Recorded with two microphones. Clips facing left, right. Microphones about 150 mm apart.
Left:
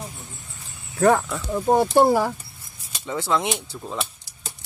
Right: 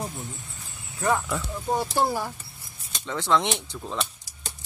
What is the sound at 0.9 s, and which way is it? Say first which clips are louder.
Speech: left 7 dB; 60° left (ahead or behind).